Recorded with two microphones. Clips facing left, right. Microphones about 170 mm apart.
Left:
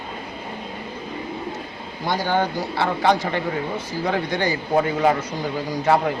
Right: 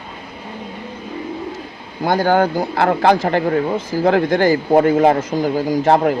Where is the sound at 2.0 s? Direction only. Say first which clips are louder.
Right 7 dB; 50° right (ahead or behind).